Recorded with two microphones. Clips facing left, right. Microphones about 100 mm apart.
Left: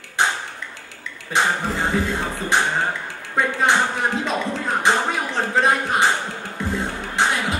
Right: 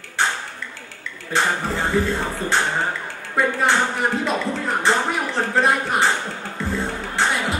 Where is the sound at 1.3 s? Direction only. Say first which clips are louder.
Even; 15° left (ahead or behind).